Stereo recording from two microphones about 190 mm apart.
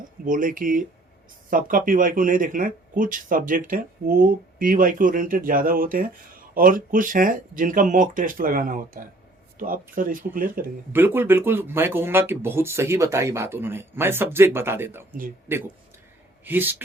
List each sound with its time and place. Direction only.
0.3 s speech: 45° right (ahead or behind)
10.9 s speech: 10° right (ahead or behind)